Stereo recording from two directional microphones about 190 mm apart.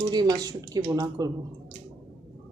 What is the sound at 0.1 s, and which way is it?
Speech, 20° right (ahead or behind).